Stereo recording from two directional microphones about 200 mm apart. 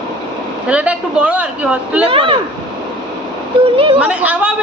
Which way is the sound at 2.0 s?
25° right (ahead or behind).